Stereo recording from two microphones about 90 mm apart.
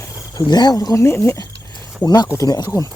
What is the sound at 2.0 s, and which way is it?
Speech, 40° left (ahead or behind).